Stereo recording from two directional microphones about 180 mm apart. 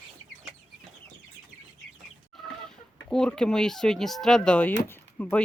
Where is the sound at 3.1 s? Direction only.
5° left (ahead or behind).